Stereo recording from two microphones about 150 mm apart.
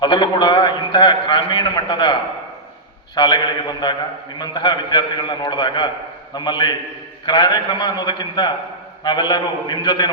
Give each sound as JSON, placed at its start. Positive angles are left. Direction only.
{"t": 0.0, "sound": "a man's voice", "side_deg": 30}
{"t": 3.2, "sound": "a man's voice", "side_deg": 25}